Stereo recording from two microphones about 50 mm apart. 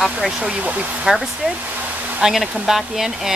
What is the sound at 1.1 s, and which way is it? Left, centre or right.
Speech, centre.